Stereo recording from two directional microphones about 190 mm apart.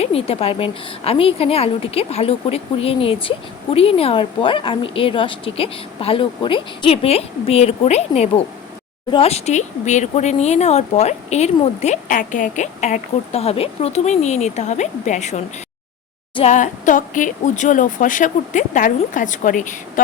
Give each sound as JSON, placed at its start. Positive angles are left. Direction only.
{"t": 0.0, "sound": "a woman's voice", "side_deg": 30}